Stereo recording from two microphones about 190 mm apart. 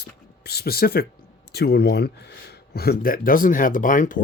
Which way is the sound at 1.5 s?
60° left (ahead or behind).